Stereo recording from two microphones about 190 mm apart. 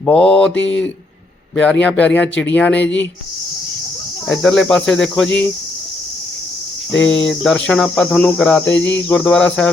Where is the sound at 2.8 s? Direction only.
75° left (ahead or behind).